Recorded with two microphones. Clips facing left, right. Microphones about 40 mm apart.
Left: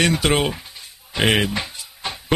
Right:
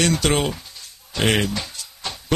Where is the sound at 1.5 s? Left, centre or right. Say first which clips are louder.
Left 2 dB; left.